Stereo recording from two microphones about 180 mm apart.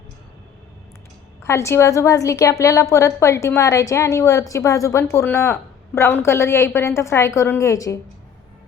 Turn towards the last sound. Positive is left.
turn(degrees=15)  # may be behind; listen again after turning